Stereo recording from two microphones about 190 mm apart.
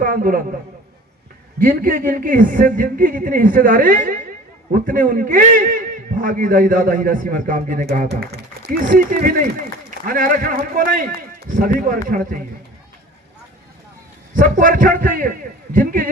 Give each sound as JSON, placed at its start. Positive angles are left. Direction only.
{"t": 0.0, "sound": "a man's voice", "side_deg": -45}
{"t": 1.5, "sound": "a man's voice", "side_deg": -45}
{"t": 14.3, "sound": "a man's voice", "side_deg": -45}